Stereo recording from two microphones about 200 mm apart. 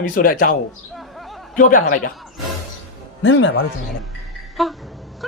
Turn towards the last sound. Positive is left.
turn(degrees=0)  # may be behind; listen again after turning